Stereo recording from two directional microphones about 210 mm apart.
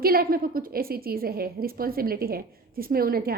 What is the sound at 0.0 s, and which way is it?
Speech, 45° right (ahead or behind).